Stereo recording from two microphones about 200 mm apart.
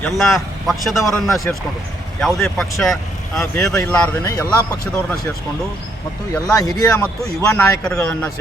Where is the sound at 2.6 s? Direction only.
Centre (ahead or behind).